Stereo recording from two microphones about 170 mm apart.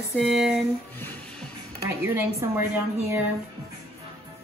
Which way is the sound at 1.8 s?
15° right (ahead or behind).